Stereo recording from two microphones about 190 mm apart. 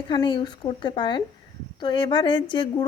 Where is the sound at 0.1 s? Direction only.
25° left (ahead or behind).